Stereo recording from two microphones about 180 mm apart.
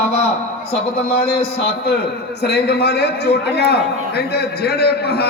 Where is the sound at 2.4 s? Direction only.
65° left (ahead or behind).